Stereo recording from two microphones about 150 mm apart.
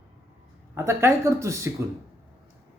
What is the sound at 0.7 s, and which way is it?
Speech, 15° right (ahead or behind).